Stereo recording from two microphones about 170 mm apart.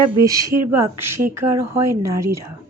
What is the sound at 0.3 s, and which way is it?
Speech, 20° right (ahead or behind).